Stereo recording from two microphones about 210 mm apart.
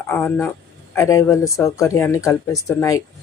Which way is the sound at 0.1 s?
5° left (ahead or behind).